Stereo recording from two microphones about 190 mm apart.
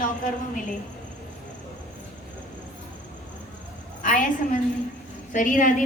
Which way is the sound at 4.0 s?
45° left (ahead or behind).